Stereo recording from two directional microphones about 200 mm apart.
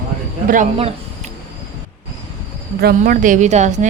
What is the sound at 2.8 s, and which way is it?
A woman's voice, 45° right (ahead or behind).